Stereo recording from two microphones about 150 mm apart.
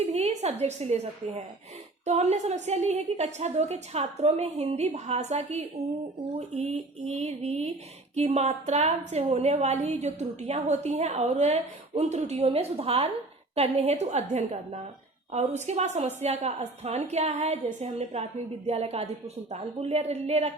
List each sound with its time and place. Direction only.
0.1 s a woman's voice: 45° right (ahead or behind)